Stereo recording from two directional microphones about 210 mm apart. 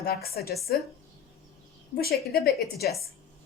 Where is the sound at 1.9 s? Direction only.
45° left (ahead or behind).